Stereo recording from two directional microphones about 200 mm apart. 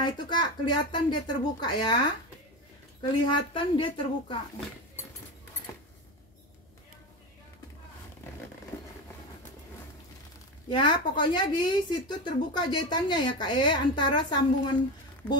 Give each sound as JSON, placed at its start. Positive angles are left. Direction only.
{"t": 0.0, "sound": "a woman's voice", "side_deg": 20}
{"t": 3.3, "sound": "a woman's voice", "side_deg": 25}
{"t": 10.7, "sound": "a woman's voice", "side_deg": 25}